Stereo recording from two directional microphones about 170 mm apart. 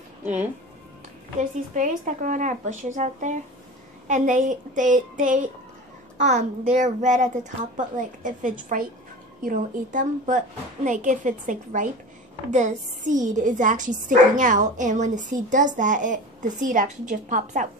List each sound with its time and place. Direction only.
0.2 s speech: 10° right (ahead or behind)
1.4 s a woman's voice: 45° right (ahead or behind)